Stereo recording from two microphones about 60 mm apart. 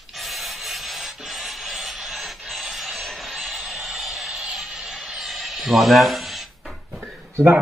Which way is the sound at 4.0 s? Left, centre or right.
Centre.